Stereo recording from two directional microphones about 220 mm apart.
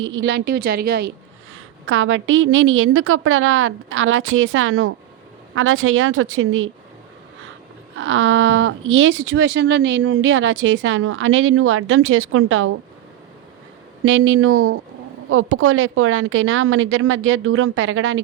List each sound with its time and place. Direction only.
0.0 s a woman's voice: 55° right (ahead or behind)
1.5 s a woman's voice: 65° right (ahead or behind)
7.9 s speech: 60° right (ahead or behind)
14.0 s a woman's voice: 65° right (ahead or behind)